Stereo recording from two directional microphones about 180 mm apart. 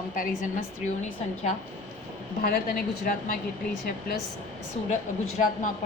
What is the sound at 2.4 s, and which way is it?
Speech, 55° left (ahead or behind).